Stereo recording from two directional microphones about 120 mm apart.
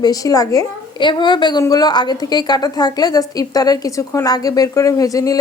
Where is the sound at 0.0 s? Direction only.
30° left (ahead or behind).